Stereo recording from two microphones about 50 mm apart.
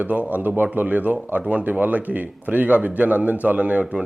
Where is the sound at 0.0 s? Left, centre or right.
Right.